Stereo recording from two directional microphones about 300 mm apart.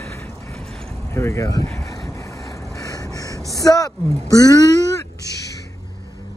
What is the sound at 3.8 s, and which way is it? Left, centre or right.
Speech, centre.